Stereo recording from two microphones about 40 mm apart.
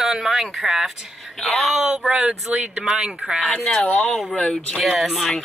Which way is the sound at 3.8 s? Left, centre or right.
Left.